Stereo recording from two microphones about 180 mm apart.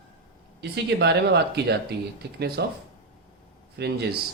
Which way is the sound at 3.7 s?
70° right (ahead or behind).